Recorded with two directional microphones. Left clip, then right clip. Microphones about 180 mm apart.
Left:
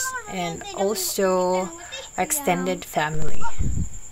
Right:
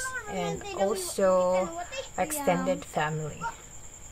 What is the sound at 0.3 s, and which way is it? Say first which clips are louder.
A woman's voice: left 3 dB; 25° left (ahead or behind).